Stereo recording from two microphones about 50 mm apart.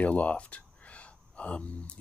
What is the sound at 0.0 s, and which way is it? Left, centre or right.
Speech, left.